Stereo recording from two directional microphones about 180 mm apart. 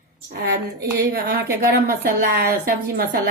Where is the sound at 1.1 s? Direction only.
60° right (ahead or behind).